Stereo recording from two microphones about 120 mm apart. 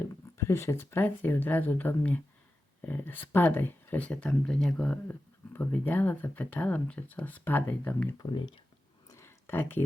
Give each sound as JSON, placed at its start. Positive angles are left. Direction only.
{"t": 0.3, "sound": "speech", "side_deg": 20}
{"t": 8.2, "sound": "speech", "side_deg": 40}
{"t": 9.0, "sound": "a sound", "side_deg": 20}